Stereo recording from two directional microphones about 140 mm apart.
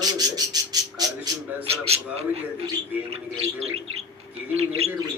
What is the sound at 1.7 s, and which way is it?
Bird, 45° right (ahead or behind).